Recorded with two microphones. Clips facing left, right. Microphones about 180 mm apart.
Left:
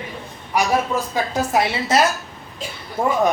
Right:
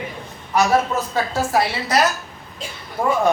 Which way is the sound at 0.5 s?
10° left (ahead or behind).